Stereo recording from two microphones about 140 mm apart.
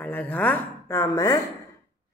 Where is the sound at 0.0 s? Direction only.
10° left (ahead or behind).